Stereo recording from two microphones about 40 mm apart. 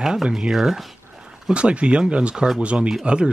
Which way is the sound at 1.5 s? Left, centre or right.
Right.